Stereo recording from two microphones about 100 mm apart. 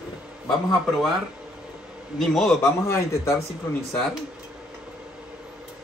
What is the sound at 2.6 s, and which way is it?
Speech, 30° left (ahead or behind).